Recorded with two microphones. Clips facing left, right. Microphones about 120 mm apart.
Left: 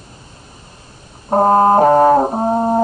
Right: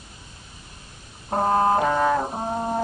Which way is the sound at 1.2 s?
40° left (ahead or behind).